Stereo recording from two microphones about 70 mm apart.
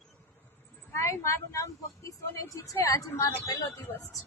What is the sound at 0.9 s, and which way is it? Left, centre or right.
Speech, left.